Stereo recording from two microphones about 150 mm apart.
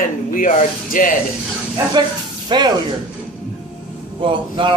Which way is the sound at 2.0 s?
30° right (ahead or behind).